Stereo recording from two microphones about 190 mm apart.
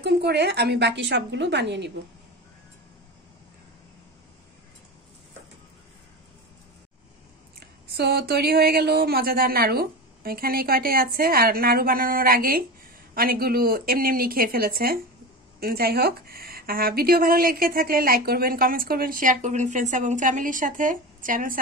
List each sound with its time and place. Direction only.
0.0 s a woman's voice: 60° right (ahead or behind)
7.9 s speech: 60° right (ahead or behind)